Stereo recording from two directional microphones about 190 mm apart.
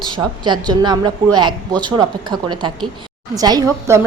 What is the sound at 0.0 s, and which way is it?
A woman's voice, 25° right (ahead or behind).